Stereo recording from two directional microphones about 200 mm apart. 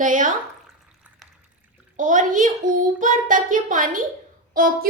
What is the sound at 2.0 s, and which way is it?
A child's voice, 40° right (ahead or behind).